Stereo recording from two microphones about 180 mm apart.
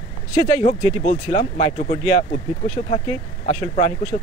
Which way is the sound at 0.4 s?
40° left (ahead or behind).